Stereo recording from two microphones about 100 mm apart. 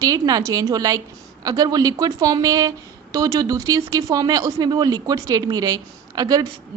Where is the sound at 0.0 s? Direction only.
35° right (ahead or behind).